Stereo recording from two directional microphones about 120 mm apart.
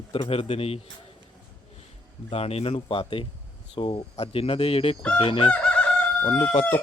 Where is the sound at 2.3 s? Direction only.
55° left (ahead or behind).